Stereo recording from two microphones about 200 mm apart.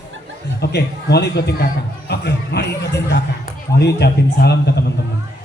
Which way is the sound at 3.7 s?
55° left (ahead or behind).